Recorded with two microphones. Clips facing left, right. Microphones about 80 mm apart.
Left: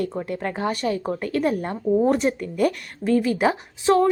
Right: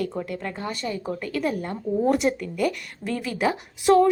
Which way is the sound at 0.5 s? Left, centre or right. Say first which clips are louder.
Left 6 dB; left.